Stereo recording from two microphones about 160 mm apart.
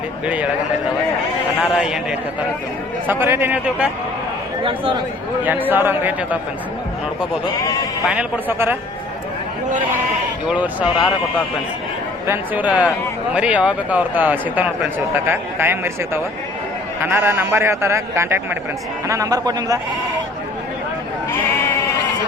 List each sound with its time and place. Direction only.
1.6 s a man's voice: 5° right (ahead or behind)
3.1 s a man's voice: 15° right (ahead or behind)
4.6 s a man's voice: 30° right (ahead or behind)
5.4 s a man's voice: 10° right (ahead or behind)
7.6 s speech: 20° left (ahead or behind)
8.1 s a man's voice: 10° right (ahead or behind)
10.5 s a man's voice: 10° right (ahead or behind)
12.3 s a man's voice: 10° right (ahead or behind)